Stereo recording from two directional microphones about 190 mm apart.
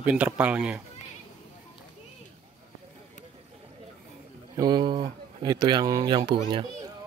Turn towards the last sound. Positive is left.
turn(degrees=-25)  # may be behind; listen again after turning